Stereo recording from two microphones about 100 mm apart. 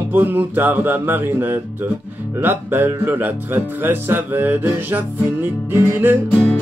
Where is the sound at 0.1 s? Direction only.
20° right (ahead or behind).